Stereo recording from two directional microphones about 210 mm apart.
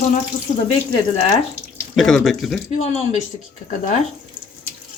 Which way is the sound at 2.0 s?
Centre (ahead or behind).